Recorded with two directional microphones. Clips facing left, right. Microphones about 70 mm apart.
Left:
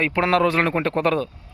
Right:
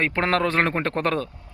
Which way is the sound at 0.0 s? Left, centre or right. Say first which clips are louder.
Left 3 dB; right.